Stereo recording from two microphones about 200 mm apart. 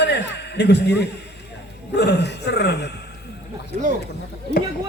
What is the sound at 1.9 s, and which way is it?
Speech, 55° left (ahead or behind).